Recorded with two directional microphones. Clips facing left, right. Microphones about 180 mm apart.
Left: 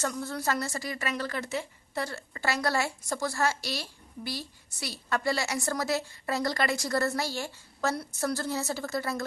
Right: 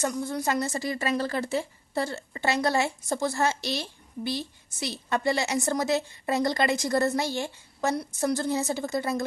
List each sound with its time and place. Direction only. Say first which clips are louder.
0.0 s a woman's voice: right 3 dB; 15° right (ahead or behind)